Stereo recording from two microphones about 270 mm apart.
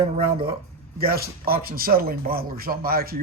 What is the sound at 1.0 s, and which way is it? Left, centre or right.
Speech, right.